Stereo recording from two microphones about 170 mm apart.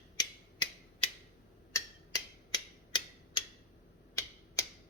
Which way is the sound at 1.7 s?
20° left (ahead or behind).